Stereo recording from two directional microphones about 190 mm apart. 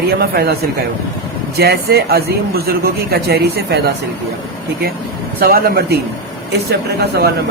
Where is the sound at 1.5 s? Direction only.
55° right (ahead or behind).